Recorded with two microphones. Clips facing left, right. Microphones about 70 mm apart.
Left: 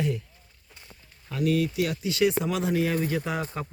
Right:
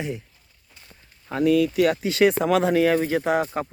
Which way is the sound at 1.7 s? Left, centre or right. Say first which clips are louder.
Right 7 dB; right.